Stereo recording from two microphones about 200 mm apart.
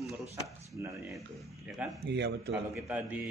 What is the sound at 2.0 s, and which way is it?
Speech, 60° right (ahead or behind).